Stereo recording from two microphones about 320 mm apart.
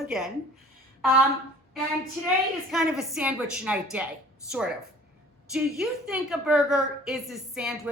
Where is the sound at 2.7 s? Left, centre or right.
Centre.